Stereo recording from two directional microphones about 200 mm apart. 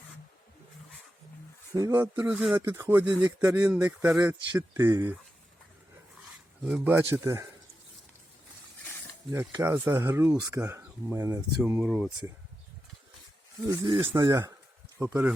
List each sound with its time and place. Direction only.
1.7 s speech: 15° right (ahead or behind)
6.7 s speech: 5° right (ahead or behind)
9.3 s speech: 10° right (ahead or behind)
13.7 s speech: 20° right (ahead or behind)